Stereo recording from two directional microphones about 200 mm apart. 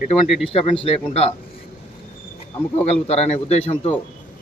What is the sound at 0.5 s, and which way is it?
Speech, 30° left (ahead or behind).